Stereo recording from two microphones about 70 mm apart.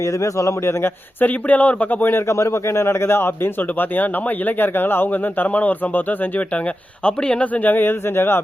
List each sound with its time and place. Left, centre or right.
0.0 s a man's voice: left
1.2 s speech: left
2.2 s speech: left